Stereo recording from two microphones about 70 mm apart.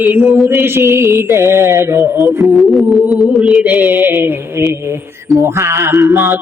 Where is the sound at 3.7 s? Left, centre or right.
Centre.